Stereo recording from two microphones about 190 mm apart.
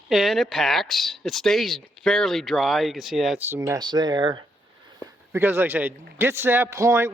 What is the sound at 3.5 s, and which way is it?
Speech, 15° right (ahead or behind).